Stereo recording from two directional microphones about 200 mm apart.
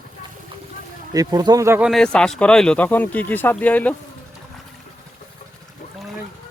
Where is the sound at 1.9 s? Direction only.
5° left (ahead or behind).